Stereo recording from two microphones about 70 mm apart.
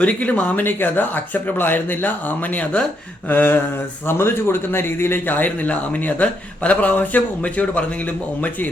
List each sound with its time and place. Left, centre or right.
0.0 s a man's voice: left
3.2 s a man's voice: left